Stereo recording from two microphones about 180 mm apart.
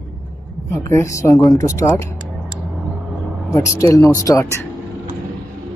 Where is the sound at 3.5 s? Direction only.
15° left (ahead or behind).